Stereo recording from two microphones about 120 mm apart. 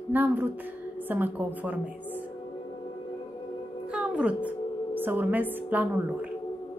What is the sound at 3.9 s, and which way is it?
Music, 10° right (ahead or behind).